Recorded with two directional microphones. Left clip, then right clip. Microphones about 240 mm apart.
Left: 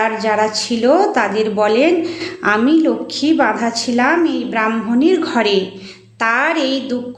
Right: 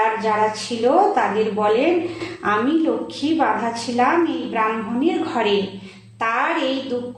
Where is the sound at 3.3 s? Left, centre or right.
Left.